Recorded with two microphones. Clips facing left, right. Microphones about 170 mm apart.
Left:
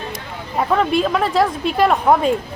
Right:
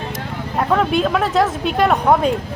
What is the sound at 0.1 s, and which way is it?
Speech, centre (ahead or behind).